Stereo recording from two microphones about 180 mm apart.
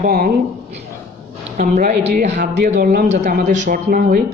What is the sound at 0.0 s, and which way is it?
Speech, 50° right (ahead or behind).